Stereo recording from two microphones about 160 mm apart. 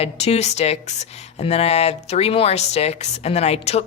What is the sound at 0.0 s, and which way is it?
Speech, 40° left (ahead or behind).